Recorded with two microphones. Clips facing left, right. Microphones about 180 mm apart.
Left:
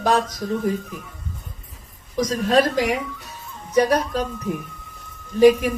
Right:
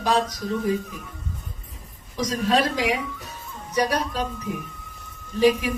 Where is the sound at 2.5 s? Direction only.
50° left (ahead or behind).